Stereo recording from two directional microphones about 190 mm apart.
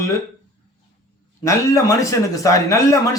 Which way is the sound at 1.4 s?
15° left (ahead or behind).